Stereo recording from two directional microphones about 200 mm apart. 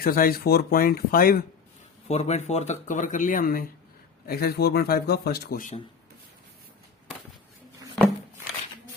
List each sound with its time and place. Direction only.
0.0 s a man's voice: 45° left (ahead or behind)
2.0 s a man's voice: 35° left (ahead or behind)